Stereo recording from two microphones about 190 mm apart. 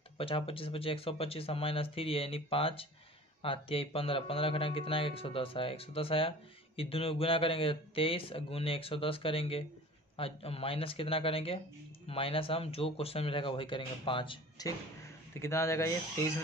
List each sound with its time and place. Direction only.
0.2 s speech: 30° left (ahead or behind)
15.3 s speech: 15° left (ahead or behind)